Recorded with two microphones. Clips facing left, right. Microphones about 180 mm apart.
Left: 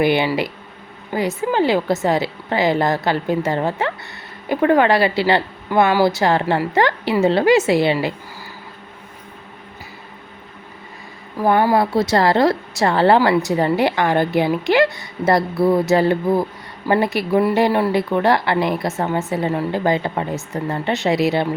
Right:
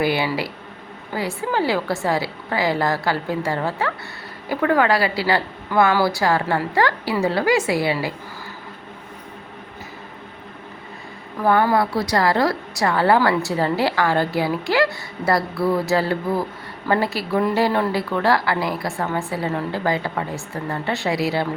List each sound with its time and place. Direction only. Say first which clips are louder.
0.0 s speech: left 4 dB; 20° left (ahead or behind)
11.3 s speech: left 2 dB; 15° left (ahead or behind)